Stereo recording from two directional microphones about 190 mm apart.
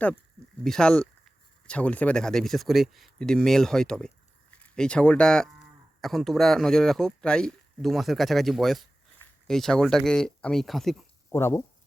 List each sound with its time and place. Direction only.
0.6 s speech: 5° left (ahead or behind)
11.3 s speech: 15° left (ahead or behind)